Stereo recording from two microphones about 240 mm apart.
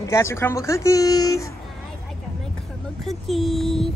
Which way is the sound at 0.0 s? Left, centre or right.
Centre.